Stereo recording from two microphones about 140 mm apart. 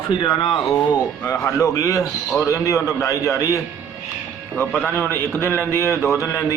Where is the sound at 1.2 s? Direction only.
25° left (ahead or behind).